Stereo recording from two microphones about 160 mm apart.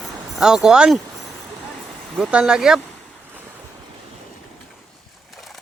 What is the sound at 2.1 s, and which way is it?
Speech, 5° right (ahead or behind).